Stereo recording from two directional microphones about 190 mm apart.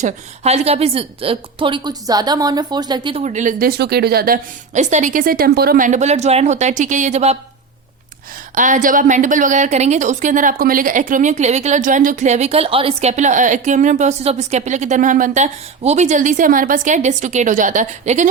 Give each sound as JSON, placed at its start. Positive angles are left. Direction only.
{"t": 0.0, "sound": "a woman's voice", "side_deg": -35}
{"t": 3.2, "sound": "speech", "side_deg": -40}
{"t": 4.7, "sound": "a woman's voice", "side_deg": -40}
{"t": 8.5, "sound": "a woman's voice", "side_deg": -40}